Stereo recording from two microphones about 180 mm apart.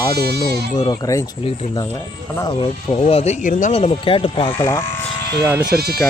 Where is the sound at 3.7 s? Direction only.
35° left (ahead or behind).